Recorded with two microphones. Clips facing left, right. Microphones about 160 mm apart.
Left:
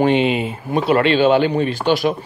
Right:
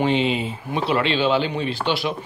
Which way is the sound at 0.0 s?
55° left (ahead or behind).